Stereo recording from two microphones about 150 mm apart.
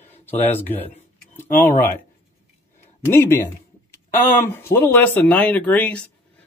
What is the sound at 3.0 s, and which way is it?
Speech, 15° left (ahead or behind).